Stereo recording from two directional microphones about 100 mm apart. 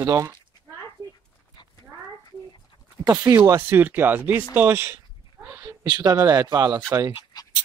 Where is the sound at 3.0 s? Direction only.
35° right (ahead or behind).